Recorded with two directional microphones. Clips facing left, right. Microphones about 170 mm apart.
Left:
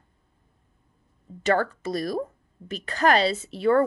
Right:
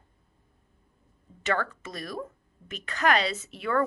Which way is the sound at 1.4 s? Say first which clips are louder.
Left 6 dB; 35° left (ahead or behind).